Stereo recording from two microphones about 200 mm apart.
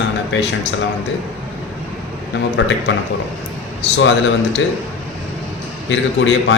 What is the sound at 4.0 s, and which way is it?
Speech, 65° left (ahead or behind).